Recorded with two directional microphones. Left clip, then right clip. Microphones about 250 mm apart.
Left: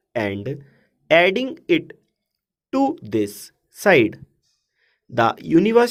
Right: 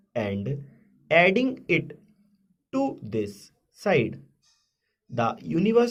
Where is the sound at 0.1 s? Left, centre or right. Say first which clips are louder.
Left 5 dB; left.